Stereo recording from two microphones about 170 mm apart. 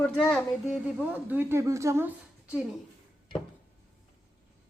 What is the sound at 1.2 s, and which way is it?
A woman's voice, 15° right (ahead or behind).